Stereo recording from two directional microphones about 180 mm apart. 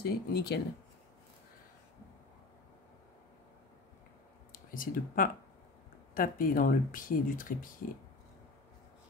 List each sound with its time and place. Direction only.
0.0 s speech: 65° left (ahead or behind)
4.5 s speech: 50° left (ahead or behind)